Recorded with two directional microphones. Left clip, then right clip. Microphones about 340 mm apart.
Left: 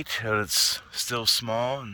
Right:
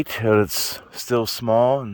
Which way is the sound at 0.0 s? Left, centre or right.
Right.